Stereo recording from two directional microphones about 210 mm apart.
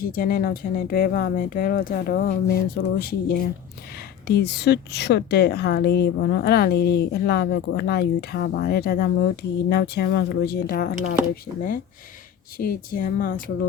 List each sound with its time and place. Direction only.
0.0 s a woman's voice: 45° left (ahead or behind)
12.5 s a woman's voice: 45° left (ahead or behind)